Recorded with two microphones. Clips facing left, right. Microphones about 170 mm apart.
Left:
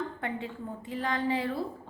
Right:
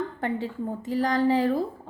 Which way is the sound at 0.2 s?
35° right (ahead or behind).